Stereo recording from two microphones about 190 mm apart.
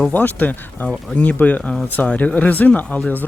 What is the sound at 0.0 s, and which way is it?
Speech, 10° left (ahead or behind).